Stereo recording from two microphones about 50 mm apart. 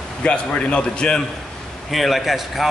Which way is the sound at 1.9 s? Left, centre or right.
Centre.